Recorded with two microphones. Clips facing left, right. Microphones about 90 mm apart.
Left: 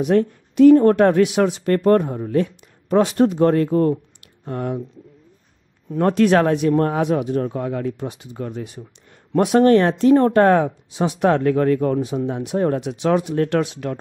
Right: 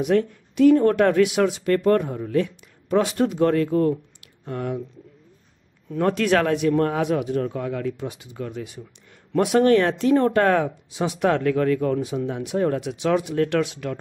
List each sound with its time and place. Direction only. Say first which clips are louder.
0.0 s speech: left 3 dB; 35° left (ahead or behind)
5.9 s speech: left 4 dB; 35° left (ahead or behind)